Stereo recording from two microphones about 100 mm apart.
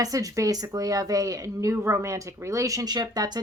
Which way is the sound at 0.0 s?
35° right (ahead or behind).